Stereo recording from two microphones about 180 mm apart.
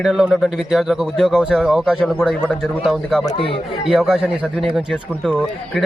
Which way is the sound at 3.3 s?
30° left (ahead or behind).